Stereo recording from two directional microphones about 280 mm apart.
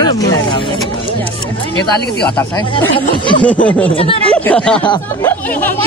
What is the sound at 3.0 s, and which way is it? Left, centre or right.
Speech, centre.